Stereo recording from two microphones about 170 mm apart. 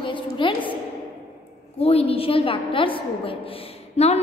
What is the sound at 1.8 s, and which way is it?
A woman's voice, 35° left (ahead or behind).